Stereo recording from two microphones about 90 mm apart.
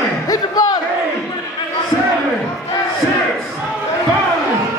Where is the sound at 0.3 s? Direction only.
45° left (ahead or behind).